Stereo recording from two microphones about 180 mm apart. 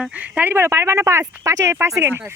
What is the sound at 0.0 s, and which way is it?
Speech, 10° right (ahead or behind).